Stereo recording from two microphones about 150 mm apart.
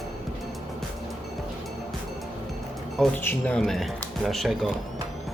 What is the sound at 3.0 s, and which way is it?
Speech, 10° left (ahead or behind).